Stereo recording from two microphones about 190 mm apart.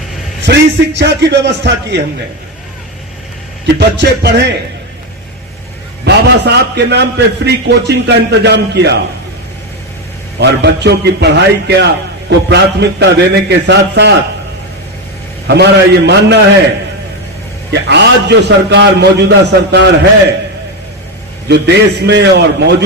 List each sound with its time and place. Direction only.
0.5 s a man's voice: 60° right (ahead or behind)
3.8 s a man's voice: 60° right (ahead or behind)
6.1 s a man's voice: 65° right (ahead or behind)
10.4 s a man's voice: 60° right (ahead or behind)
15.4 s a man's voice: 60° right (ahead or behind)
17.7 s a man's voice: 65° right (ahead or behind)
21.5 s a man's voice: 65° right (ahead or behind)